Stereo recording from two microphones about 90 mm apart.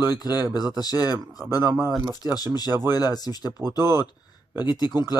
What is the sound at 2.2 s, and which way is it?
A man's voice, 50° left (ahead or behind).